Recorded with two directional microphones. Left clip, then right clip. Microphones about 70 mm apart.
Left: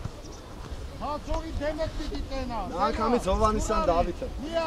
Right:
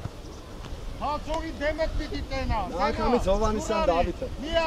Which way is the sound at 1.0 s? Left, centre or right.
Right.